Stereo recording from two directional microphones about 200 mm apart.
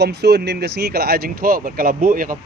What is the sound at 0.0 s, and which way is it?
Speech, 55° right (ahead or behind).